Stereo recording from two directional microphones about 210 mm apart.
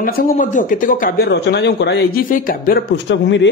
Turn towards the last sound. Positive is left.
turn(degrees=55)  # may be behind; listen again after turning